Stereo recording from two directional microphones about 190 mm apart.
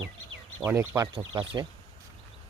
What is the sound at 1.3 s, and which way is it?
Speech, 25° right (ahead or behind).